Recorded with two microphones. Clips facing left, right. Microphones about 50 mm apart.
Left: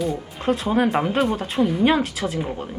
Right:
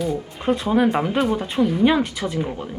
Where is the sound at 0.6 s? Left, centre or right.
Centre.